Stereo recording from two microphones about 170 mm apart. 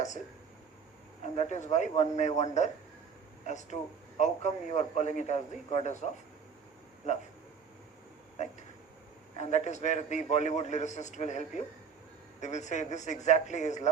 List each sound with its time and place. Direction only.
1.4 s a man's voice: 45° left (ahead or behind)
9.4 s a man's voice: 40° left (ahead or behind)